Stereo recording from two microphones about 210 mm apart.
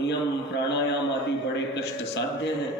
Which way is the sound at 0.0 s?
55° left (ahead or behind).